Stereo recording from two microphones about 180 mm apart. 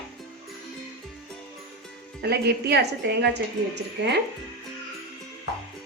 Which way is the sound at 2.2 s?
65° right (ahead or behind).